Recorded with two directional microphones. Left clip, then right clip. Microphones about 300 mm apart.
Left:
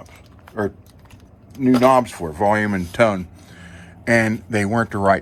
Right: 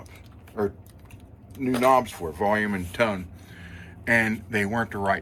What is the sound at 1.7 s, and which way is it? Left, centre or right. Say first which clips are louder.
Speech: left 6 dB; left.